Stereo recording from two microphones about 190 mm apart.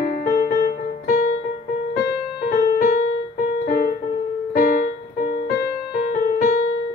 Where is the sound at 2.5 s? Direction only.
45° left (ahead or behind).